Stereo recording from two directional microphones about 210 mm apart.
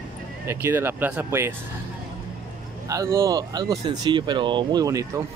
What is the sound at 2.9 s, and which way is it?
Speech, 15° right (ahead or behind).